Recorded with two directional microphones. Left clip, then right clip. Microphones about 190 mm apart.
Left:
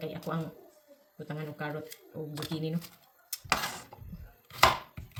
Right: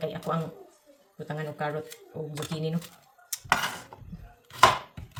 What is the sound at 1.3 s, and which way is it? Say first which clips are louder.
Cutlery: right 6 dB; 25° right (ahead or behind).